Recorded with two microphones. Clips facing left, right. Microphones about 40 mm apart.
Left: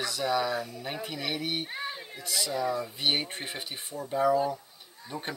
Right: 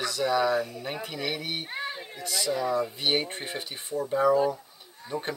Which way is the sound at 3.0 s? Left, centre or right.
Centre.